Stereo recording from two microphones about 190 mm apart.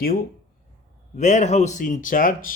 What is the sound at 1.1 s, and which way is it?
Speech, 40° left (ahead or behind).